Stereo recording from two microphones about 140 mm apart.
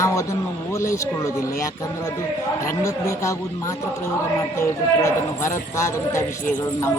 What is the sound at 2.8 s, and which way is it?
Speech, 20° left (ahead or behind).